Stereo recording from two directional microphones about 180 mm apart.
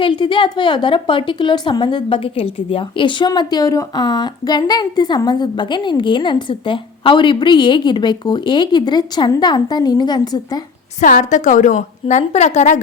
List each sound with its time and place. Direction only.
0.0 s a woman's voice: 25° left (ahead or behind)
11.0 s a woman's voice: 45° left (ahead or behind)